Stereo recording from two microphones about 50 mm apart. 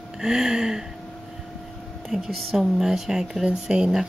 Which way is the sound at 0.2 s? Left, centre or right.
Centre.